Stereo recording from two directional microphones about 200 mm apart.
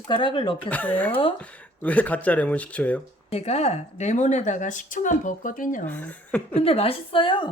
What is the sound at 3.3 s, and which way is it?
Speech, 30° left (ahead or behind).